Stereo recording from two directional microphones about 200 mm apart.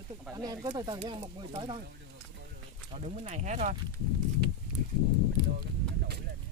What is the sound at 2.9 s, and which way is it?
Speech, 35° right (ahead or behind).